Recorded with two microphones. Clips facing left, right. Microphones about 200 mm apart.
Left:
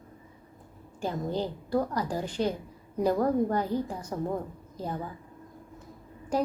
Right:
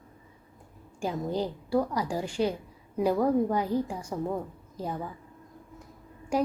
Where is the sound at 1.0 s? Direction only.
10° right (ahead or behind).